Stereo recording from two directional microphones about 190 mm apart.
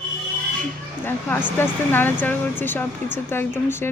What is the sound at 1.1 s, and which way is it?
A woman's voice, 10° left (ahead or behind).